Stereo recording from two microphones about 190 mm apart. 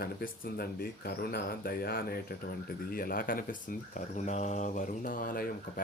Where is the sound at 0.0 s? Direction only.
55° left (ahead or behind).